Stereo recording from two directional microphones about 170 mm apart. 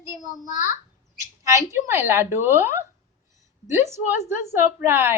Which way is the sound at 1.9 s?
15° right (ahead or behind).